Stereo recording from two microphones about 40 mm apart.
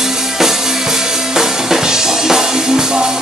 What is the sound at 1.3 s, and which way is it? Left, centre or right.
Music, centre.